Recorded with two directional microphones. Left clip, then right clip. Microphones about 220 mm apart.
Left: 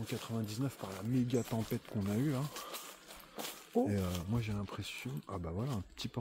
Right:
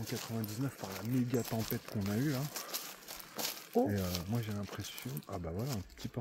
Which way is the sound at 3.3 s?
50° right (ahead or behind).